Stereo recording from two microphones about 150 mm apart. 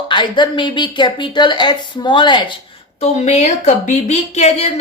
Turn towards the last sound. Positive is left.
turn(degrees=50)  # may be behind; listen again after turning